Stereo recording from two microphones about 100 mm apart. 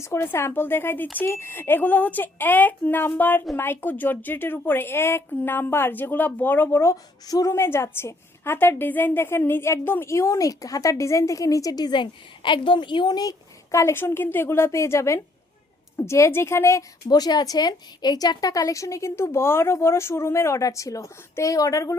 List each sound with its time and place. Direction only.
0.0 s a woman's voice: 25° left (ahead or behind)
7.5 s a woman's voice: 25° left (ahead or behind)
17.1 s a woman's voice: 45° left (ahead or behind)